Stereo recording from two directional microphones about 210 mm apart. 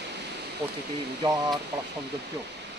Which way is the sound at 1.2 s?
20° right (ahead or behind).